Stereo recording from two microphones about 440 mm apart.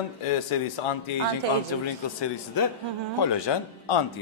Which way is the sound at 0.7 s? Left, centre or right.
Left.